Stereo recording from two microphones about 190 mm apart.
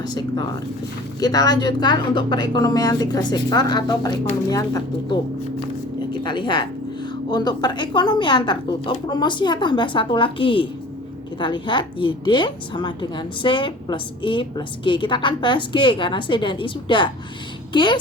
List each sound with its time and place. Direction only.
0.0 s a woman's voice: 20° left (ahead or behind)
6.1 s a woman's voice: 25° left (ahead or behind)